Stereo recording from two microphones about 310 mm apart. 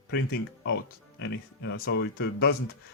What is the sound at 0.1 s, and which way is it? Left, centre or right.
Speech, left.